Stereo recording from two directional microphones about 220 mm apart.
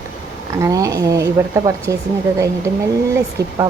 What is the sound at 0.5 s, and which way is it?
Speech, 15° right (ahead or behind).